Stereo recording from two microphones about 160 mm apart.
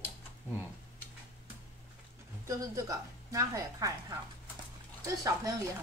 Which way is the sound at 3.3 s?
20° right (ahead or behind).